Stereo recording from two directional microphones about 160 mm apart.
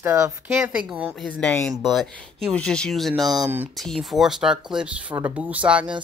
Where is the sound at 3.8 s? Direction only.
Centre (ahead or behind).